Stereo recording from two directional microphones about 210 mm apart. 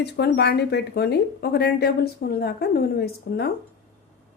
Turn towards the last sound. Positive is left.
turn(degrees=50)  # may be behind; listen again after turning